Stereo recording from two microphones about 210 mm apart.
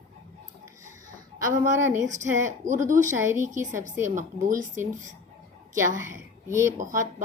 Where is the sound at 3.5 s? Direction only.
35° right (ahead or behind).